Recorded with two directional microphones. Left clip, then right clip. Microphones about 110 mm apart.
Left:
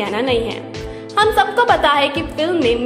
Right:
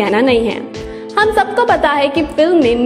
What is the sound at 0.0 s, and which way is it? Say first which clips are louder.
A woman's voice: right 6 dB; 35° right (ahead or behind).